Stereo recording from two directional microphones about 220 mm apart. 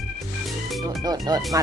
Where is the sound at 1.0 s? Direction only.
15° right (ahead or behind).